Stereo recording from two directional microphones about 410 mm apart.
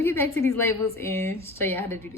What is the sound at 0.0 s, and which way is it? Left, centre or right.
A woman's voice, centre.